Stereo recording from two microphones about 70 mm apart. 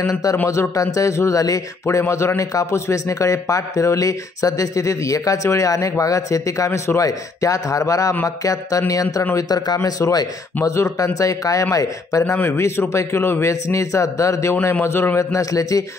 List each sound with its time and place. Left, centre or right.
0.0 s speech: left
12.3 s speech: left
15.1 s speech: left